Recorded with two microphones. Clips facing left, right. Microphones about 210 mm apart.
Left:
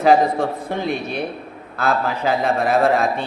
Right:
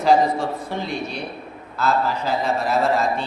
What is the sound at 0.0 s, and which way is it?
A man's voice, 55° left (ahead or behind).